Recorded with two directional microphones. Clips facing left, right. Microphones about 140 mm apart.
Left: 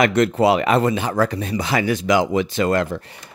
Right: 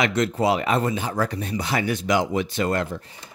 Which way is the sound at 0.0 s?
65° left (ahead or behind).